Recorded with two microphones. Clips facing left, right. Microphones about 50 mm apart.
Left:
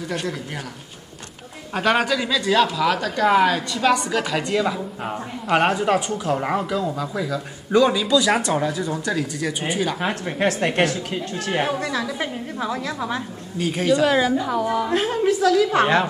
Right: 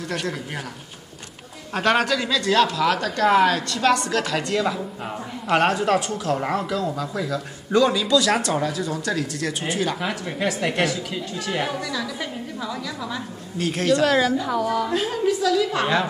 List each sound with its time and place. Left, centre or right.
1.7 s speech: centre
9.9 s a woman's voice: left
13.6 s speech: centre
14.9 s a woman's voice: left